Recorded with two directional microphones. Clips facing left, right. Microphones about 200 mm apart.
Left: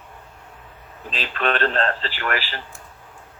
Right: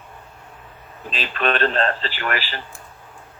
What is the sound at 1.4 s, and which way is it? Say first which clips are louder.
Speech: right 1 dB; 15° right (ahead or behind).